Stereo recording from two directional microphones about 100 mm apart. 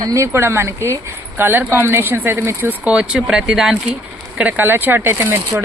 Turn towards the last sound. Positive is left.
turn(degrees=-25)  # may be behind; listen again after turning